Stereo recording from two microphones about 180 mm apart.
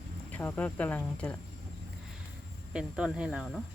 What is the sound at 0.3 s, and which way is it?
Speech, 10° left (ahead or behind).